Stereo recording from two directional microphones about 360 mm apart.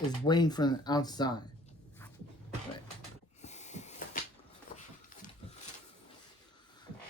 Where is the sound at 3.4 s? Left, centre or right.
Centre.